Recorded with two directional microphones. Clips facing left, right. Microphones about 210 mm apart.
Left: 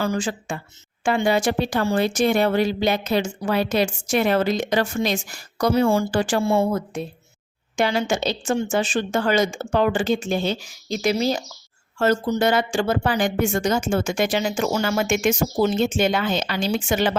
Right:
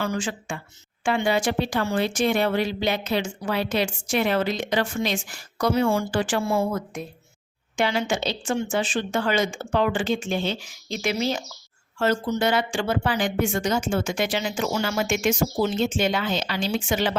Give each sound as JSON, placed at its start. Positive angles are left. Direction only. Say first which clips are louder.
{"t": 0.0, "sound": "speech", "louder": "left 3 dB", "side_deg": 35}
{"t": 6.4, "sound": "speech", "louder": "left 4 dB", "side_deg": 25}
{"t": 7.8, "sound": "speech", "louder": "left 3 dB", "side_deg": 40}